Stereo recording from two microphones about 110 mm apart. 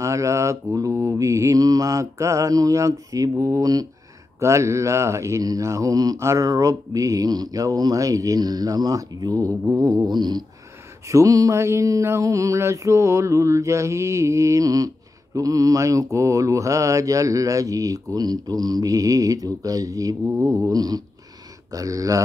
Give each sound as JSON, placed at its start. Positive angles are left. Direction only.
{"t": 0.0, "sound": "mantra", "side_deg": -25}